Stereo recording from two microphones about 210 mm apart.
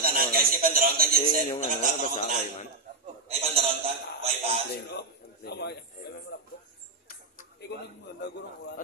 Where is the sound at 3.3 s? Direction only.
30° right (ahead or behind).